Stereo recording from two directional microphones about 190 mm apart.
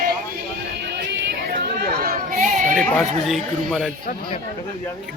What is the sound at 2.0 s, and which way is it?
Chatter, 50° right (ahead or behind).